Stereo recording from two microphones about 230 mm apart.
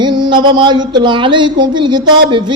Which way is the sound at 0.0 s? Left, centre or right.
Centre.